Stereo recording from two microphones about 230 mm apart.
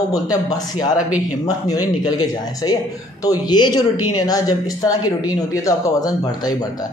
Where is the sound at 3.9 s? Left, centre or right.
Left.